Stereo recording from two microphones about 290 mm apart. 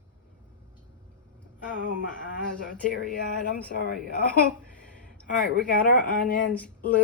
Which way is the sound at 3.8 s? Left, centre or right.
Left.